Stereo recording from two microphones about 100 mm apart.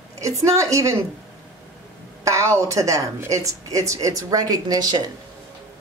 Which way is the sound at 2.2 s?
30° right (ahead or behind).